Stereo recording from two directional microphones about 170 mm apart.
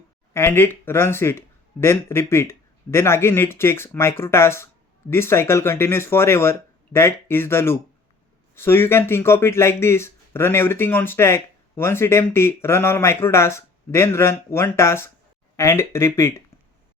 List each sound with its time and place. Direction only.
0.3 s speech: 15° left (ahead or behind)